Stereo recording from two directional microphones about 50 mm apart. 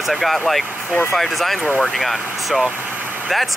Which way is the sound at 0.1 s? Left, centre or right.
Centre.